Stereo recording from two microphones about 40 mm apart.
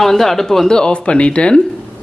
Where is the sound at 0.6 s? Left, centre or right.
Left.